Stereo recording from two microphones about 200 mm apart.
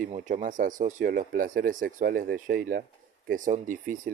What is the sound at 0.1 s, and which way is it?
Speech, 35° right (ahead or behind).